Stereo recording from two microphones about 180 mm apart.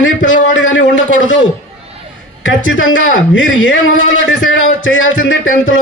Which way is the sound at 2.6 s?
90° left.